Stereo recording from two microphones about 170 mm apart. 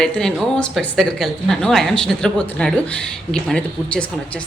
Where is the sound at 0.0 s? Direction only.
5° left (ahead or behind).